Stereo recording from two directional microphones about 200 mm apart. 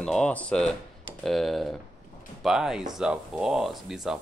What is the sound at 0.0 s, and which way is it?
Speech, 5° left (ahead or behind).